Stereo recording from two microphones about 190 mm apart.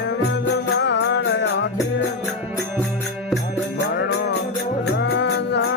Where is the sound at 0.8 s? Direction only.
70° left (ahead or behind).